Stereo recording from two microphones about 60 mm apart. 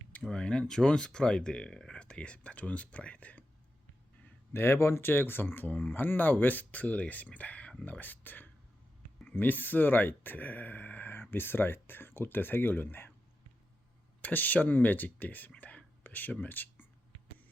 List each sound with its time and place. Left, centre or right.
0.3 s speech: centre
4.5 s speech: left
14.2 s speech: left